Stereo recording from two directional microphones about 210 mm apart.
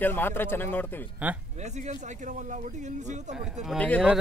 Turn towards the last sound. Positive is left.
turn(degrees=5)  # may be behind; listen again after turning